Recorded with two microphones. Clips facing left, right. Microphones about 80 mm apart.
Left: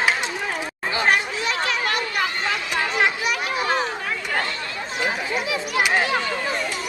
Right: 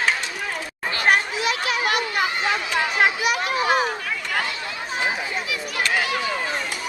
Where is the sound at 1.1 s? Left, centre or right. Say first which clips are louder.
Right 3 dB; centre.